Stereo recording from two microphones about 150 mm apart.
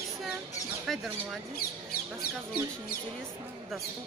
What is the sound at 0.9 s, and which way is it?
Speech, centre (ahead or behind).